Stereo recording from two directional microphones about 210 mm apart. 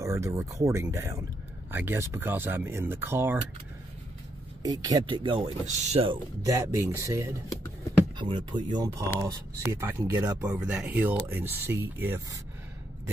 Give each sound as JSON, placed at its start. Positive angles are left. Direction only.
{"t": 0.0, "sound": "speech", "side_deg": -15}
{"t": 4.6, "sound": "speech", "side_deg": -20}
{"t": 6.4, "sound": "speech", "side_deg": -15}